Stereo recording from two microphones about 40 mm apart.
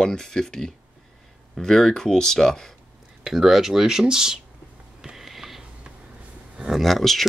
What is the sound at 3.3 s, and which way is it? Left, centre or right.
Speech, centre.